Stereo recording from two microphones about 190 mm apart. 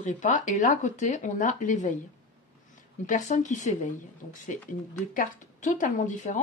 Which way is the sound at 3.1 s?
40° left (ahead or behind).